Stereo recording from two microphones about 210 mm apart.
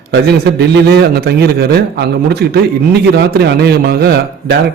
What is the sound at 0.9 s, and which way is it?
A man's voice, 50° right (ahead or behind).